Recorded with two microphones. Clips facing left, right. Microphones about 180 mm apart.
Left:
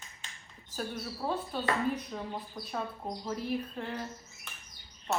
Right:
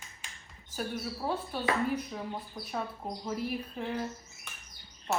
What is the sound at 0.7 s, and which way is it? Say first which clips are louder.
Speech: right 2 dB; 5° right (ahead or behind).